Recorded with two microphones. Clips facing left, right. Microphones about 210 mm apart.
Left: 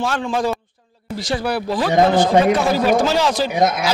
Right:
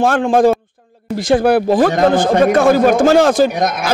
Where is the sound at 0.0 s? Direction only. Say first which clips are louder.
Right 9 dB; 50° right (ahead or behind).